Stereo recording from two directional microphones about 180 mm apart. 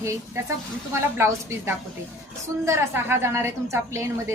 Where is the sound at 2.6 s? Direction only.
15° right (ahead or behind).